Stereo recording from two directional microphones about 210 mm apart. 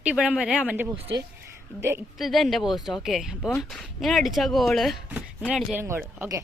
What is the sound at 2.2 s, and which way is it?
Speech, centre (ahead or behind).